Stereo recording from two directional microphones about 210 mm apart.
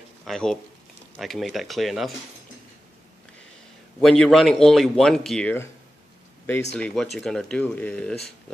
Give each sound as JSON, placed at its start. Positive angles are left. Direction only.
{"t": 0.2, "sound": "speech", "side_deg": 0}
{"t": 4.0, "sound": "speech", "side_deg": 0}
{"t": 6.7, "sound": "speech", "side_deg": 5}